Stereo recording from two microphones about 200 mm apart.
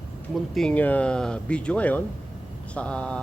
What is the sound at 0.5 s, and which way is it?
A man's voice, 5° left (ahead or behind).